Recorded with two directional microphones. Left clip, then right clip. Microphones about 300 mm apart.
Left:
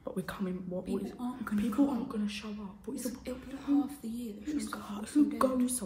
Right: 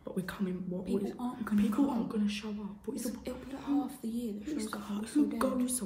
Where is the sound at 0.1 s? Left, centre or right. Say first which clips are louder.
Even; centre.